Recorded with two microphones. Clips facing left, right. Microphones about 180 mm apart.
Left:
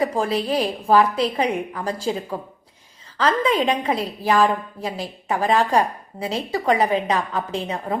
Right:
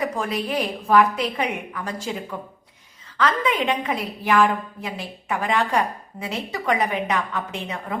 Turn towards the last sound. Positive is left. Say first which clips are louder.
# left 5 dB
turn(degrees=35)  # may be behind; listen again after turning